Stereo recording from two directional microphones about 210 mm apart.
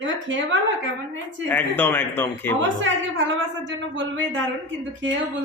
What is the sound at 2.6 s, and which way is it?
Speech, 65° right (ahead or behind).